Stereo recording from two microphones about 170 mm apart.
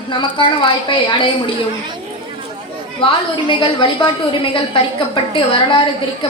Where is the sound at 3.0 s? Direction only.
30° left (ahead or behind).